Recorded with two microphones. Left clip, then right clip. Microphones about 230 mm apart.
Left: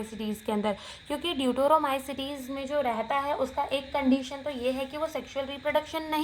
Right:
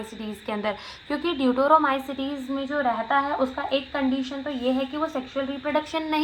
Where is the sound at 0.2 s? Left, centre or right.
Left.